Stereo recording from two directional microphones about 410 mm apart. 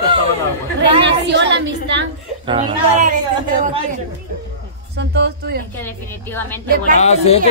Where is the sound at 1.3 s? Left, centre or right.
Right.